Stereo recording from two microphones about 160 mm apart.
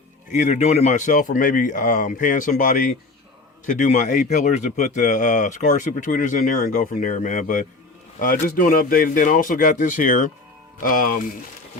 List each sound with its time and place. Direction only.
0.3 s a man's voice: 45° left (ahead or behind)